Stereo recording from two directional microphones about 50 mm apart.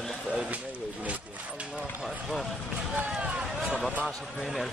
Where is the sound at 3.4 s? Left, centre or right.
Centre.